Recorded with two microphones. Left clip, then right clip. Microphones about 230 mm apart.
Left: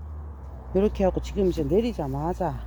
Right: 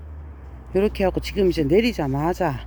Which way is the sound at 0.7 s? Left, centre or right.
Centre.